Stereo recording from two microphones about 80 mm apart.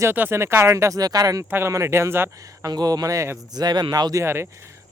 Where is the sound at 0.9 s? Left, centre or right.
Right.